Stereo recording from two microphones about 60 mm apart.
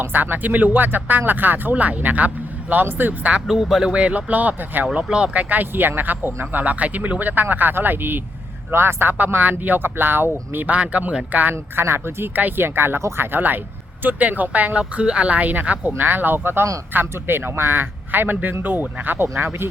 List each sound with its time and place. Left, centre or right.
0.0 s speech: right
3.4 s speech: centre; by 4.9 s right
4.9 s speech: centre; by 10.7 s right
10.7 s speech: right
11.8 s speech: right